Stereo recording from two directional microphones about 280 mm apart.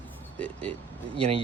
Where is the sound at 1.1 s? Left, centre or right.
Centre.